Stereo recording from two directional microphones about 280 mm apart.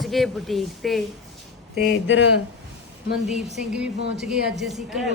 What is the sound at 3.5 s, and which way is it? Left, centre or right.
A woman's voice, centre.